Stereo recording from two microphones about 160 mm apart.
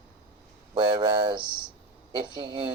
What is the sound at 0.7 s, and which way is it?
Speech, 30° right (ahead or behind).